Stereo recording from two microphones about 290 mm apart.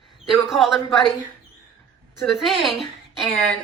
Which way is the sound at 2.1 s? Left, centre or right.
Centre.